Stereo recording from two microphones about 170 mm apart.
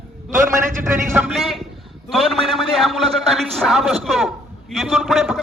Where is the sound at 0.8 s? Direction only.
15° right (ahead or behind).